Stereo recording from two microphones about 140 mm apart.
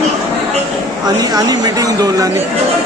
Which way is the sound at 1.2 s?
25° right (ahead or behind).